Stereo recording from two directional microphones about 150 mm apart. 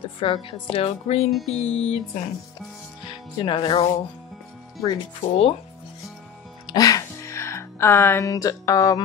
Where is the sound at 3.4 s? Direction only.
35° left (ahead or behind).